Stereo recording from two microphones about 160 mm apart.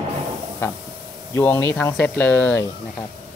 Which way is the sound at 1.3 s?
10° left (ahead or behind).